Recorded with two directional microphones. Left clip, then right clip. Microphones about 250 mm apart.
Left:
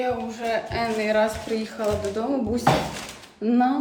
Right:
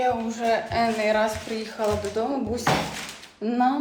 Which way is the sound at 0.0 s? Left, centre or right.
Centre.